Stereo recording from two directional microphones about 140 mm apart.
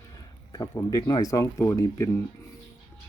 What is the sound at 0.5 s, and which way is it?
Speech, 25° left (ahead or behind).